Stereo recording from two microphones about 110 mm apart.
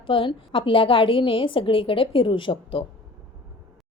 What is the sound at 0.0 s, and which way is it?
A woman's voice, 50° left (ahead or behind).